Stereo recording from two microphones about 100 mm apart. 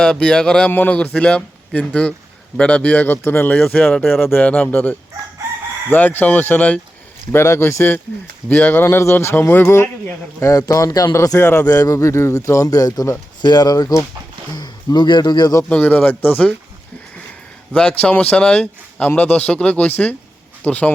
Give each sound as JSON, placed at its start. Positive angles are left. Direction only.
{"t": 0.0, "sound": "a man's voice", "side_deg": 10}
{"t": 7.3, "sound": "a man's voice", "side_deg": 25}
{"t": 15.7, "sound": "a man's voice", "side_deg": 15}
{"t": 17.7, "sound": "a man's voice", "side_deg": 15}